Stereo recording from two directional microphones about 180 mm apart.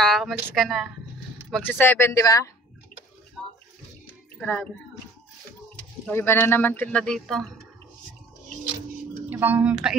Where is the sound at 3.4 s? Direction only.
Centre (ahead or behind).